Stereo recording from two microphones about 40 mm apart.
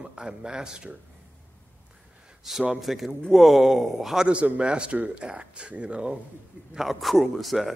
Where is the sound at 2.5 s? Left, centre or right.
Centre.